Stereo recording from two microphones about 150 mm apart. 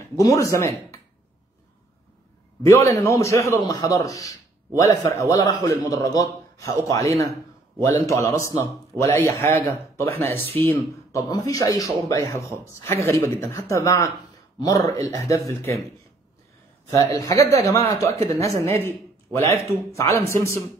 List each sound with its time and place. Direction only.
0.2 s a man's voice: 20° left (ahead or behind)
2.6 s a man's voice: 20° left (ahead or behind)
16.9 s a man's voice: 20° left (ahead or behind)